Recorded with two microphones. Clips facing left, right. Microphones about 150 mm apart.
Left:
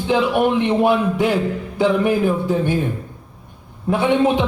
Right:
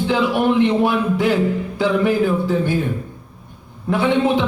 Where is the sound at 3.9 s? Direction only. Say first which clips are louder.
Left 1 dB; 15° left (ahead or behind).